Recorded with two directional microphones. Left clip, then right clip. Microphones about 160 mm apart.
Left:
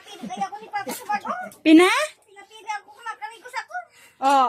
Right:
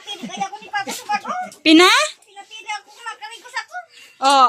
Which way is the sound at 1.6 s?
10° left (ahead or behind).